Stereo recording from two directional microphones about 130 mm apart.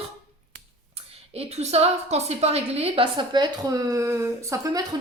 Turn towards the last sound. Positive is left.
turn(degrees=-20)  # may be behind; listen again after turning